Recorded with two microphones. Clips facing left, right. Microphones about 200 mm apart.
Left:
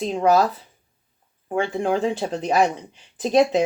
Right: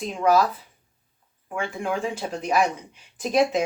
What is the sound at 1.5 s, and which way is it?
Speech, 30° left (ahead or behind).